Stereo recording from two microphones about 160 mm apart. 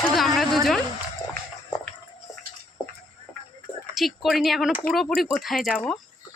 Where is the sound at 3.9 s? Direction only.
Centre (ahead or behind).